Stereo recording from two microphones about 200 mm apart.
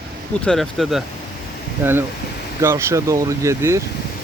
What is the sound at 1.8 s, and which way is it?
Speech, 10° right (ahead or behind).